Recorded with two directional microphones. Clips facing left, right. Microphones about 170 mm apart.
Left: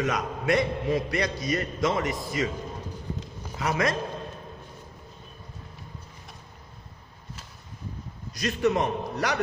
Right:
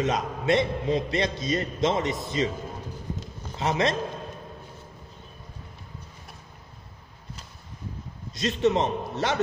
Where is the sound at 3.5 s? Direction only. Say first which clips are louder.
Right 1 dB; 25° right (ahead or behind).